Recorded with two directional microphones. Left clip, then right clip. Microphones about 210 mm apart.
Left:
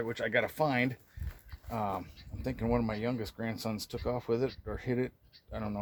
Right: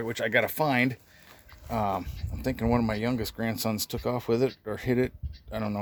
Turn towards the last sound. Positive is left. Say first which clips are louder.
# right 7 dB
turn(degrees=-55)  # may be behind; listen again after turning